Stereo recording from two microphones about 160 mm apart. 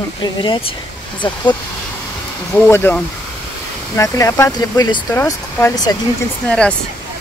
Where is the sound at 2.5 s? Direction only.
15° left (ahead or behind).